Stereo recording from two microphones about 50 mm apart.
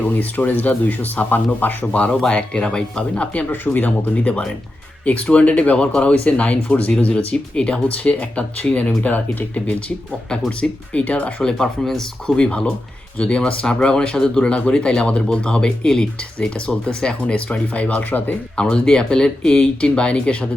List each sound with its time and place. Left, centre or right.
0.0 s speech: left
2.3 s speech: centre
3.5 s speech: left
11.6 s speech: centre
12.4 s speech: left
18.5 s speech: centre